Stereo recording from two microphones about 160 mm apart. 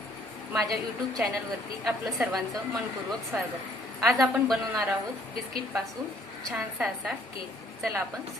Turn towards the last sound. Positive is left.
turn(degrees=-5)  # may be behind; listen again after turning